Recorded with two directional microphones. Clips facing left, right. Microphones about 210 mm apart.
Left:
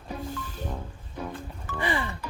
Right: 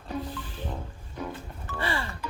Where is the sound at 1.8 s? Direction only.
15° left (ahead or behind).